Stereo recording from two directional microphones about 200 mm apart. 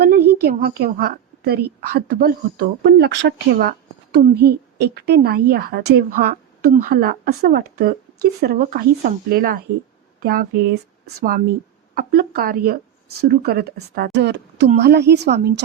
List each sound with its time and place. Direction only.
0.0 s a woman's voice: 50° right (ahead or behind)